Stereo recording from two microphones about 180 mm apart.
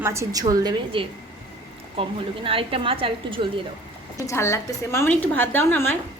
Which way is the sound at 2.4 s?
30° right (ahead or behind).